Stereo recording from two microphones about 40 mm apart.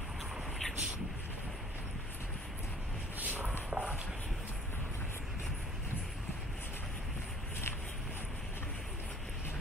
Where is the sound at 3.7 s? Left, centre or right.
Right.